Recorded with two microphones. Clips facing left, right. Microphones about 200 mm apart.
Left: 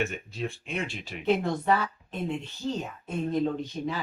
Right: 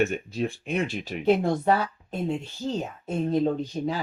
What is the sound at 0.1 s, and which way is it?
Speech, 40° right (ahead or behind).